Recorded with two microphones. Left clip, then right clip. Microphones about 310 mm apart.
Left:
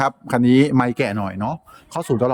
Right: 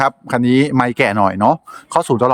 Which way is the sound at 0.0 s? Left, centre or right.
Centre.